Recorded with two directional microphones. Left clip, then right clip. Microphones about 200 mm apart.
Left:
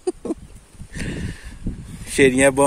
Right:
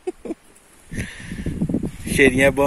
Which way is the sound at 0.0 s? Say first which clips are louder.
Left 4 dB; 30° left (ahead or behind).